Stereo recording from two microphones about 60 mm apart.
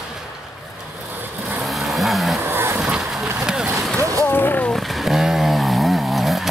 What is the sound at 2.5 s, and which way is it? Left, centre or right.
Vehicle, right.